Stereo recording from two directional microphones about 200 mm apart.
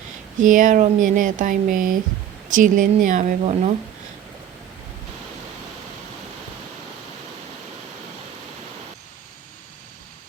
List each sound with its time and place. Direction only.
0.3 s speech: 40° right (ahead or behind)